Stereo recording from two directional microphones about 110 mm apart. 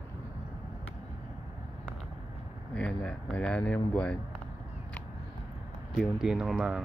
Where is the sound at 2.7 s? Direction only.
10° left (ahead or behind).